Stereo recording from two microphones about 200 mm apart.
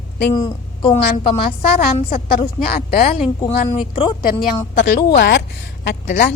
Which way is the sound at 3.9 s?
25° left (ahead or behind).